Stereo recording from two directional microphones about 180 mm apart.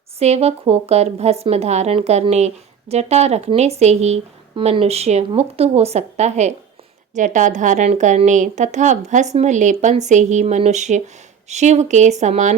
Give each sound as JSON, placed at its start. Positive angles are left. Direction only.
{"t": 0.2, "sound": "a woman's voice", "side_deg": -35}